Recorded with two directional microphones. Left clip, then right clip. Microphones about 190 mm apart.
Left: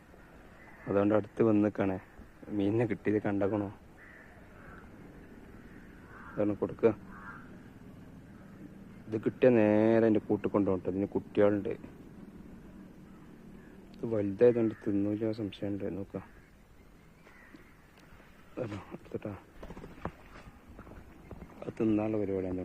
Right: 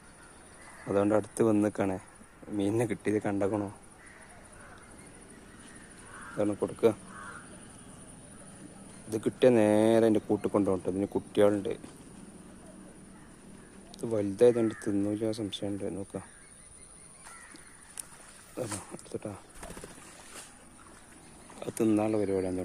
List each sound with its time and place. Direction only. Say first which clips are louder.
0.9 s speech: right 1 dB; 15° right (ahead or behind)
6.3 s speech: right 1 dB; 15° right (ahead or behind)
9.0 s speech: right 2 dB; 20° right (ahead or behind)
13.9 s speech: right 1 dB; 15° right (ahead or behind)
18.5 s speech: right 2 dB; 15° right (ahead or behind)
21.6 s speech: right 3 dB; 25° right (ahead or behind)